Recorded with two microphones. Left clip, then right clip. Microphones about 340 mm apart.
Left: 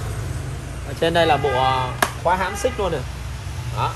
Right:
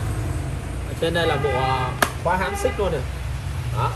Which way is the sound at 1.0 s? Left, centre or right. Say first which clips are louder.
Left 4 dB; centre.